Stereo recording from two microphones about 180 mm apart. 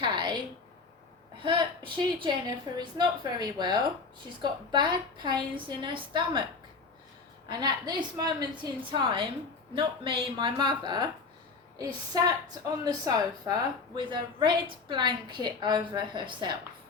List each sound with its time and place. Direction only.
0.0 s a sound: 25° right (ahead or behind)
1.5 s a woman's voice: 25° right (ahead or behind)
7.4 s a woman's voice: 25° right (ahead or behind)
12.1 s a woman's voice: 20° right (ahead or behind)